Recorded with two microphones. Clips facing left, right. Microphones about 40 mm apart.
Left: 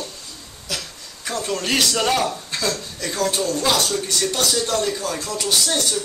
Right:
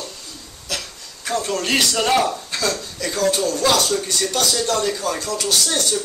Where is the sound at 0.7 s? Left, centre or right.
Centre.